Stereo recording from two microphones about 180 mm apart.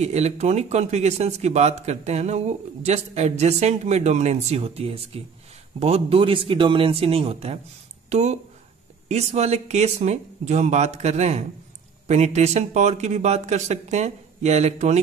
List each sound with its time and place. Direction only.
0.0 s speech: 35° right (ahead or behind)